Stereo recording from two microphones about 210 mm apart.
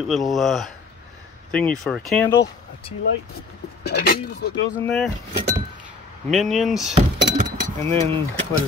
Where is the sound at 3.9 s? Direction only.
50° left (ahead or behind).